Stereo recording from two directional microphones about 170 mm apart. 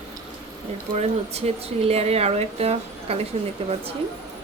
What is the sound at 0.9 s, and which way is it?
Speech, 40° right (ahead or behind).